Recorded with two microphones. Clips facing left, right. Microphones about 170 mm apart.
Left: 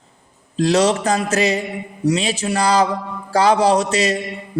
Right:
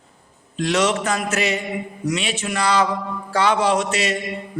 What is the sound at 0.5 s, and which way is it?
A man's voice, 35° left (ahead or behind).